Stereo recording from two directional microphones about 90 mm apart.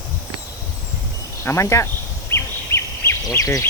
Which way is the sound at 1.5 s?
30° left (ahead or behind).